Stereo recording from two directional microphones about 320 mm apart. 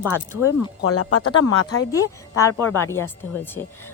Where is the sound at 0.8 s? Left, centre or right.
Left.